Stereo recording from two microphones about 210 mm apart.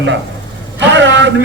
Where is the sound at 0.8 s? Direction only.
60° right (ahead or behind).